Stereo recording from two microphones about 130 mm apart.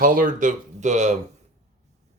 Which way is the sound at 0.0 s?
90° right.